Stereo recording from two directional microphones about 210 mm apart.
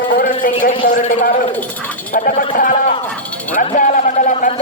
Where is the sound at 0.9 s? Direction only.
40° left (ahead or behind).